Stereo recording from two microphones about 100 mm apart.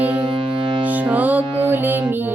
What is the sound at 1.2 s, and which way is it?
Music, 15° right (ahead or behind).